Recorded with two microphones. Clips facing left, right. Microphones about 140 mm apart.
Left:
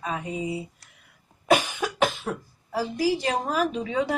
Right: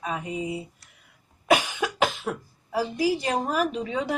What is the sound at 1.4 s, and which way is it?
A woman's voice, 5° right (ahead or behind).